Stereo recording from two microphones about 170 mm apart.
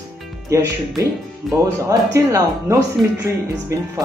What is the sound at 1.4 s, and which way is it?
Speech, centre (ahead or behind).